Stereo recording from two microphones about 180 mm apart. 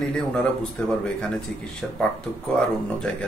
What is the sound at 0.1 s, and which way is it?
Speech, 5° left (ahead or behind).